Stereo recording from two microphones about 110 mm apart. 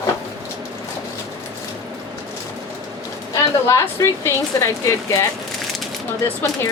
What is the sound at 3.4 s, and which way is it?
Speech, 30° left (ahead or behind).